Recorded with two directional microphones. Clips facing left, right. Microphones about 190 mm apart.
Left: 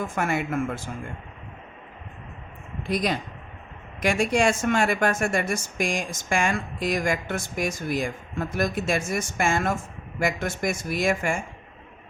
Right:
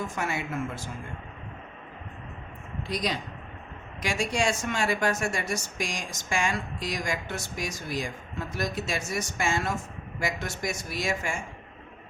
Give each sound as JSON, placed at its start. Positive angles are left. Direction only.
{"t": 0.2, "sound": "speech", "side_deg": 55}
{"t": 2.8, "sound": "speech", "side_deg": 55}